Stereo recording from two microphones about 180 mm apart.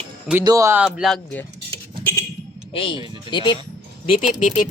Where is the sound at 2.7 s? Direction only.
30° left (ahead or behind).